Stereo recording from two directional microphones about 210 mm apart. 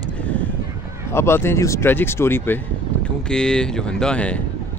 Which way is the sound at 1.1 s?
10° left (ahead or behind).